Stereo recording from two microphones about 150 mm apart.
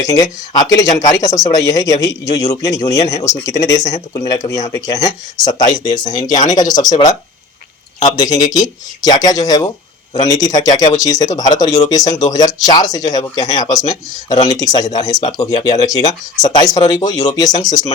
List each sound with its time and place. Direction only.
0.0 s speech: 25° left (ahead or behind)